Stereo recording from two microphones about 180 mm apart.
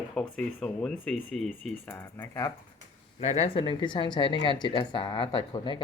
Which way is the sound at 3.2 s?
35° left (ahead or behind).